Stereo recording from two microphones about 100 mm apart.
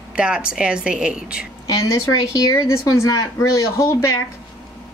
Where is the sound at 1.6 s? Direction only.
30° left (ahead or behind).